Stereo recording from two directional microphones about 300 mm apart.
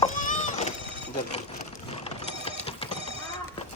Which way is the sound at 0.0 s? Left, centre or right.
Left.